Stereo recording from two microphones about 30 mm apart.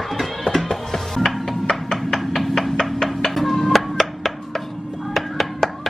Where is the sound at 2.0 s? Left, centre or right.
Centre.